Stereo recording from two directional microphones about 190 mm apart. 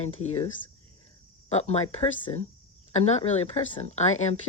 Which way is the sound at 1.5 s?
35° left (ahead or behind).